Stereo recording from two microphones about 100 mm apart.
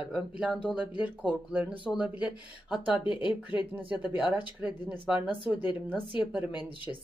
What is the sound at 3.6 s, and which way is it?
Speech, 15° right (ahead or behind).